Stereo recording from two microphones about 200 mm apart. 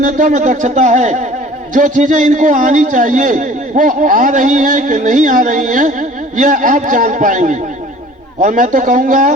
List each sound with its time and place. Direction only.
0.0 s a man's voice: 40° right (ahead or behind)